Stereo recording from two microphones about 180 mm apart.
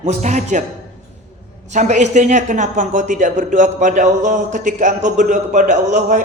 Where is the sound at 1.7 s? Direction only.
40° right (ahead or behind).